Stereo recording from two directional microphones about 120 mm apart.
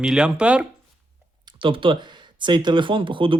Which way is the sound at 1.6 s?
45° right (ahead or behind).